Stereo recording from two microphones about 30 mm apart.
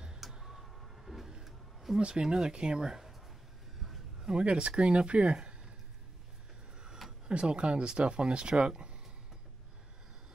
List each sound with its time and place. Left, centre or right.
0.3 s tick-tock: centre
0.7 s vehicle: centre
1.4 s a sound: centre
2.0 s speech: right; by 3.2 s centre
4.2 s speech: right
7.2 s speech: right